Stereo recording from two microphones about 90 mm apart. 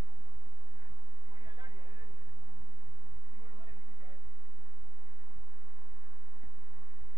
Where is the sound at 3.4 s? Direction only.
50° right (ahead or behind).